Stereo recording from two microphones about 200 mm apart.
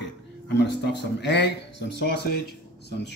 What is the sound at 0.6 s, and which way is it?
Speech, 60° left (ahead or behind).